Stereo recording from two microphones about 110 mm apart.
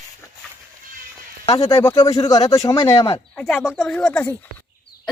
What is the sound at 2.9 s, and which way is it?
Speech, 55° left (ahead or behind).